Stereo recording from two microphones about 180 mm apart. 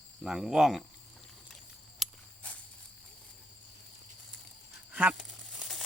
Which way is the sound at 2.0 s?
10° left (ahead or behind).